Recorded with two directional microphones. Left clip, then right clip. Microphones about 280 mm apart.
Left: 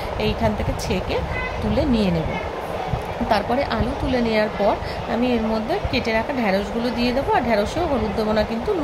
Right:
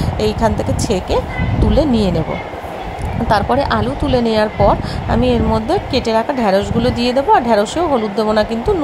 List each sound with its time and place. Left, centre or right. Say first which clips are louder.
0.2 s speech: right 7 dB; right
3.3 s speech: right 7 dB; centre